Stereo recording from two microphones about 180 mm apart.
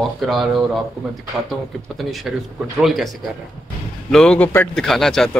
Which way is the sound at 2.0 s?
Centre (ahead or behind).